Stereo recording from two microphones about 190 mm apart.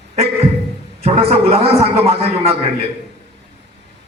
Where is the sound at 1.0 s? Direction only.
30° right (ahead or behind).